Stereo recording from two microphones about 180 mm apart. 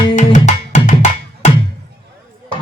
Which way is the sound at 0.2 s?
45° left (ahead or behind).